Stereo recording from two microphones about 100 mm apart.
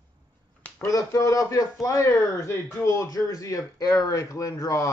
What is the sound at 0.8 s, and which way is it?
A man's voice, 35° left (ahead or behind).